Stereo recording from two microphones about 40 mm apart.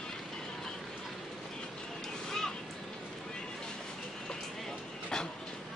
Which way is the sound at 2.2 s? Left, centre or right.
Centre.